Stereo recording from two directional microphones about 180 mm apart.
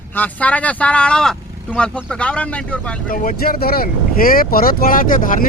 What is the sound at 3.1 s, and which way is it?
Speech, 55° left (ahead or behind).